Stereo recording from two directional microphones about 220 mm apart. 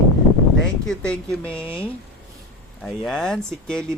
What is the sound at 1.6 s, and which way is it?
Speech, 25° left (ahead or behind).